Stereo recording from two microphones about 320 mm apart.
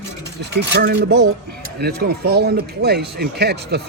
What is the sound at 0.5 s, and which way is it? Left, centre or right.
Speech, right.